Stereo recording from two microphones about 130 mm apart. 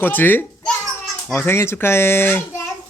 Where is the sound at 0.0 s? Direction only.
15° left (ahead or behind).